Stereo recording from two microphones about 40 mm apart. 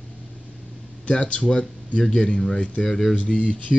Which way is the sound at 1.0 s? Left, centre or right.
Left.